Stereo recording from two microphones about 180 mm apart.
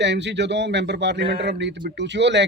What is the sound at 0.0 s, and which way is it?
Speech, 75° right (ahead or behind).